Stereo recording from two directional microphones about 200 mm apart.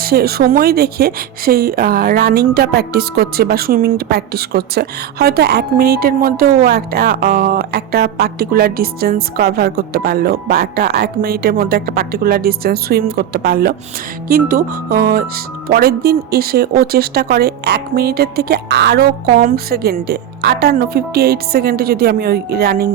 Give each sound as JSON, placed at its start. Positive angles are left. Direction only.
{"t": 0.0, "sound": "speech", "side_deg": -50}